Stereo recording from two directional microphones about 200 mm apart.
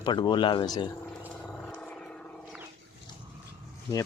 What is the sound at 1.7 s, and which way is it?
Vehicle, 5° left (ahead or behind).